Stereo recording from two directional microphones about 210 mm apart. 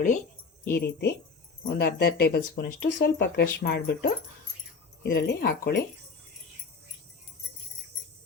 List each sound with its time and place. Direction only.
0.6 s speech: 50° left (ahead or behind)
5.1 s speech: 50° left (ahead or behind)